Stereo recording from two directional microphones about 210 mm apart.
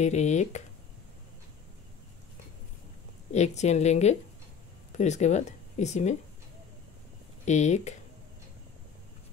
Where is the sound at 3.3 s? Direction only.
35° left (ahead or behind).